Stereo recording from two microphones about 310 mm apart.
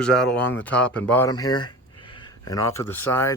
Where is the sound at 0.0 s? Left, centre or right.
Centre.